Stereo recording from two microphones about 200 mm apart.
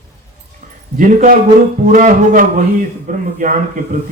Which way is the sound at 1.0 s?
40° right (ahead or behind).